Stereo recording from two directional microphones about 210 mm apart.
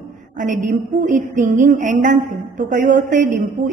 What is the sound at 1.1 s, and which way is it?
A woman's voice, 35° right (ahead or behind).